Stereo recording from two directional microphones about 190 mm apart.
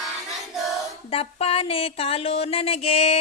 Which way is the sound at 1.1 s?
30° left (ahead or behind).